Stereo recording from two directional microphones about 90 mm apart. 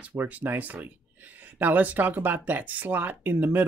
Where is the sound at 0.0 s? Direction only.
20° right (ahead or behind).